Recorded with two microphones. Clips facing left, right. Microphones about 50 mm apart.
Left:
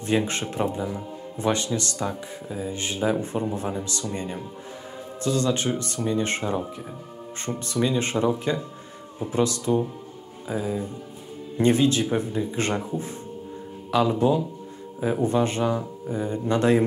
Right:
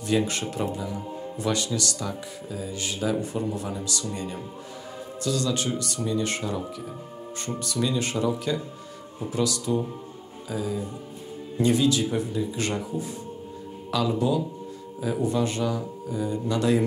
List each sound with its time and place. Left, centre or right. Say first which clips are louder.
0.0 s speech: left 1 dB; left